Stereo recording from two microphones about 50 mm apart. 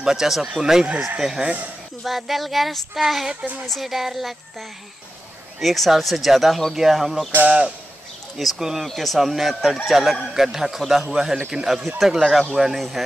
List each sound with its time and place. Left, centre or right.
0.0 s speech: centre
2.0 s speech: centre
8.4 s speech: centre